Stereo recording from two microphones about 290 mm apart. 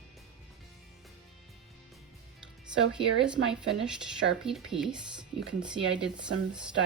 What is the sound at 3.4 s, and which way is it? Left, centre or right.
Speech, right.